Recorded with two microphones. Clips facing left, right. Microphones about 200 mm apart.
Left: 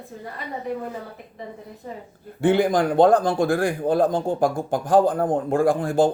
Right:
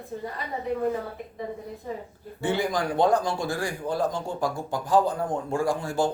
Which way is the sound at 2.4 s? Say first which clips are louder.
Left 8 dB; 55° left (ahead or behind).